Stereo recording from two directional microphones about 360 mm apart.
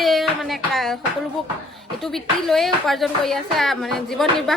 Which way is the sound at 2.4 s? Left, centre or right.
Centre.